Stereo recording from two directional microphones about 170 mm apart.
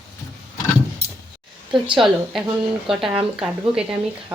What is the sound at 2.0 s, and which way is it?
A woman's voice, centre (ahead or behind).